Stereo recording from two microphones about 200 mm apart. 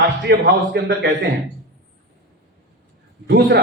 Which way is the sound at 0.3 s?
55° right (ahead or behind).